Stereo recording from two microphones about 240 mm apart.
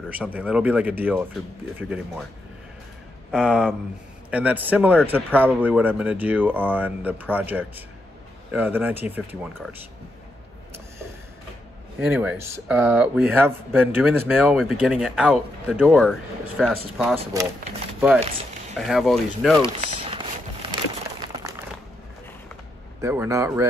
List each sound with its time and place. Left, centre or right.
0.1 s a man's voice: centre
3.3 s a man's voice: centre
12.1 s a man's voice: centre
17.2 s speech: centre
18.8 s a man's voice: centre
19.6 s a sound: right
22.9 s a man's voice: centre